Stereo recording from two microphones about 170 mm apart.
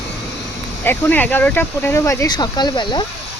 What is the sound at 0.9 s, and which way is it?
Speech, 10° left (ahead or behind).